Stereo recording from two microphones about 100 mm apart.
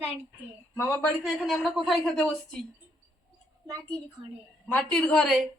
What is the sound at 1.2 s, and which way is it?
A woman's voice, centre (ahead or behind).